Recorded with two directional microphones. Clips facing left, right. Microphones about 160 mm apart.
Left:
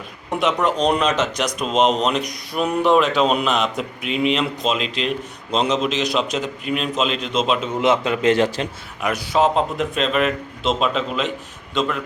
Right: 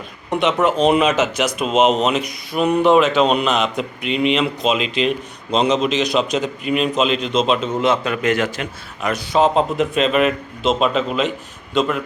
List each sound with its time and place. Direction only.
0.3 s speech: centre (ahead or behind)
7.8 s a man's voice: 20° left (ahead or behind)
9.0 s speech: 10° left (ahead or behind)